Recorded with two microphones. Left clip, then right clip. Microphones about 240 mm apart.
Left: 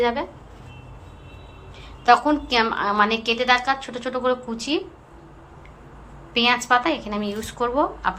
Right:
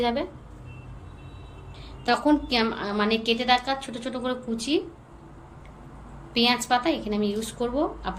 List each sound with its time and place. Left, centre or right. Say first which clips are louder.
0.0 s a woman's voice: left 4 dB; centre
2.0 s a woman's voice: left 6 dB; centre
6.3 s a woman's voice: left 4 dB; centre